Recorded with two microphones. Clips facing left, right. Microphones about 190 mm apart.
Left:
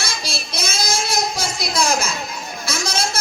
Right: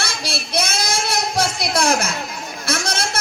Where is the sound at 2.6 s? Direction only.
60° right (ahead or behind).